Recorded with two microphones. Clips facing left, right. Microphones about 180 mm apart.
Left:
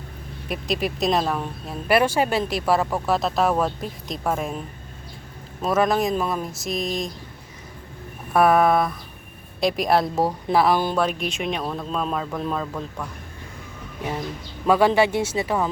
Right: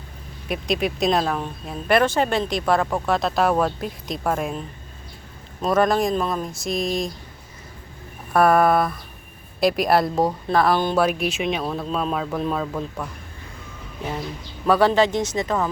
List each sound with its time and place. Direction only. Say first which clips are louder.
0.4 s speech: right 2 dB; centre (ahead or behind)
5.6 s speech: right 1 dB; 5° left (ahead or behind)
8.3 s speech: right 1 dB; centre (ahead or behind)
10.9 s speech: right 3 dB; 10° right (ahead or behind)
14.6 s speech: even; 15° left (ahead or behind)